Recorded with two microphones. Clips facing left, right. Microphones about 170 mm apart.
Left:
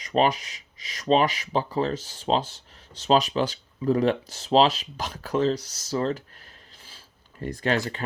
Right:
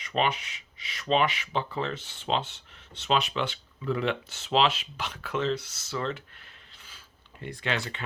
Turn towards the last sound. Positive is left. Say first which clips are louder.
# left 6 dB
turn(degrees=40)  # may be behind; listen again after turning